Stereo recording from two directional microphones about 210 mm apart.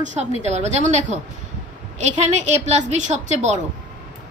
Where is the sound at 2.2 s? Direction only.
35° right (ahead or behind).